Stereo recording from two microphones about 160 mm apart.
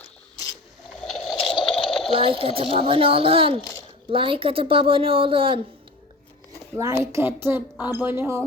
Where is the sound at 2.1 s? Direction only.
35° right (ahead or behind).